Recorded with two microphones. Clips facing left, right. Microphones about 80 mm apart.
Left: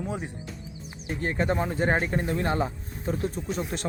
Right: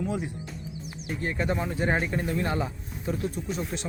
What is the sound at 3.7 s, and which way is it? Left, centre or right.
Speech, left.